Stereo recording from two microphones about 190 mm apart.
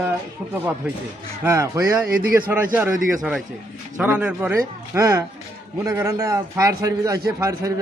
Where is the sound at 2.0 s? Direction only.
50° right (ahead or behind).